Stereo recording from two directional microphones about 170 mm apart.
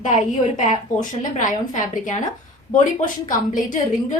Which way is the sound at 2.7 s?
50° left (ahead or behind).